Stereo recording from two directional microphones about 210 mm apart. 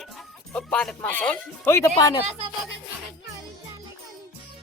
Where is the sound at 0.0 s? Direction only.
Centre (ahead or behind).